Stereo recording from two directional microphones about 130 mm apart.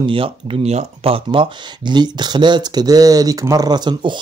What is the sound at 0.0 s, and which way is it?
Speech, 45° right (ahead or behind).